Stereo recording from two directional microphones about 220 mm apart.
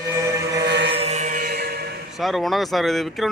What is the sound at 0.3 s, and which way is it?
Chant, 15° right (ahead or behind).